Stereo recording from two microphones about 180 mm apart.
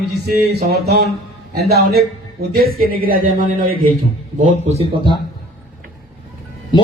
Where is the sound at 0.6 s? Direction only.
60° right (ahead or behind).